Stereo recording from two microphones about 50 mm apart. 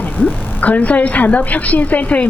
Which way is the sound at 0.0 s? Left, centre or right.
Left.